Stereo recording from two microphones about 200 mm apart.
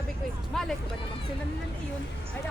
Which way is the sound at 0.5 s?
Centre (ahead or behind).